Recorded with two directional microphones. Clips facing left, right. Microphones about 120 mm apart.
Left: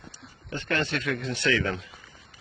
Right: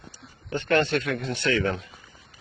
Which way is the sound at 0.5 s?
60° right (ahead or behind).